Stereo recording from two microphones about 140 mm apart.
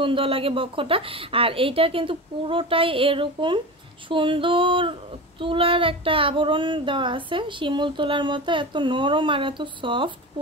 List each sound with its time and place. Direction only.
0.0 s child singing: 40° right (ahead or behind)